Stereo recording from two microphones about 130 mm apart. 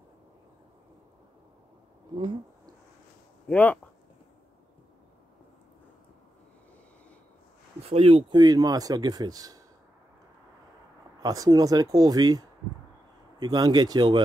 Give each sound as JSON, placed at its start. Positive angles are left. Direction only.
{"t": 3.4, "sound": "speech", "side_deg": 10}
{"t": 7.8, "sound": "speech", "side_deg": -50}
{"t": 8.3, "sound": "speech", "side_deg": -30}
{"t": 11.2, "sound": "speech", "side_deg": -25}